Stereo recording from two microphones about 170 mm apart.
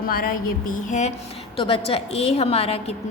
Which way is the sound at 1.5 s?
30° left (ahead or behind).